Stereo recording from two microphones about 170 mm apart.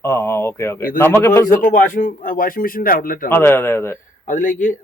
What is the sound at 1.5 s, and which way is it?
A man's voice, 55° left (ahead or behind).